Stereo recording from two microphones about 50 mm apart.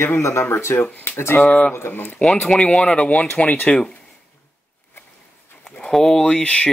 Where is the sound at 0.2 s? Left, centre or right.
Left.